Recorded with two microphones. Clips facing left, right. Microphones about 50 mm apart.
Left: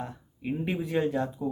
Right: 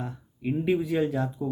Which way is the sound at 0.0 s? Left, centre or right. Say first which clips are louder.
Right 3 dB; centre.